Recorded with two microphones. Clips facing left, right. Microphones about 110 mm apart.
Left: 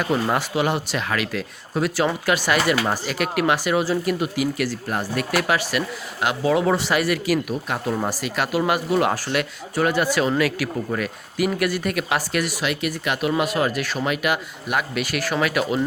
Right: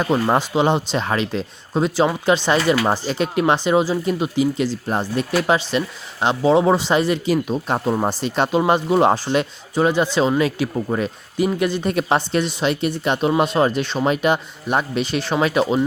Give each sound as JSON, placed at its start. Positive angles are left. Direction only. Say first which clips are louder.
{"t": 0.0, "sound": "speech", "louder": "right 4 dB", "side_deg": -25}